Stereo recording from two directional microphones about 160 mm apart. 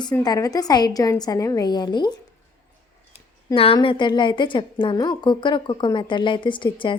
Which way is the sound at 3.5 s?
35° left (ahead or behind).